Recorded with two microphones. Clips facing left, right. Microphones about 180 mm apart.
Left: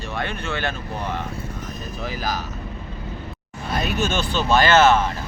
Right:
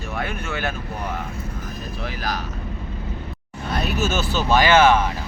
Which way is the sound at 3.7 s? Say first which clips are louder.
Even; centre (ahead or behind).